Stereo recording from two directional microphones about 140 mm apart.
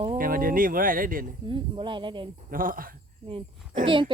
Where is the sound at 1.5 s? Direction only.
35° right (ahead or behind).